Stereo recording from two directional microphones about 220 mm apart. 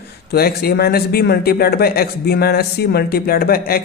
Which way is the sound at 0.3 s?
45° left (ahead or behind).